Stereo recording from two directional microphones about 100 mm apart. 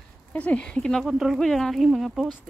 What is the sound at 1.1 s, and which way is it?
Speech, 5° right (ahead or behind).